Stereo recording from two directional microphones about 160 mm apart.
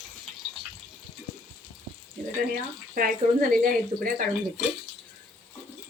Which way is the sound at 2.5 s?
60° right (ahead or behind).